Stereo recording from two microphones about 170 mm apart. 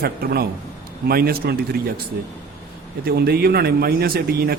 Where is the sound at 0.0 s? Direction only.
60° right (ahead or behind).